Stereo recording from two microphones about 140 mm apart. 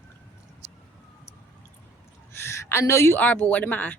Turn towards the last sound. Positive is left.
turn(degrees=10)  # may be behind; listen again after turning